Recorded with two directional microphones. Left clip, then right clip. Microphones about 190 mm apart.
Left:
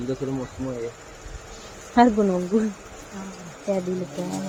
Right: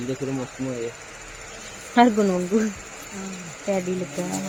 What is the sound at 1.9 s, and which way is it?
Speech, centre (ahead or behind).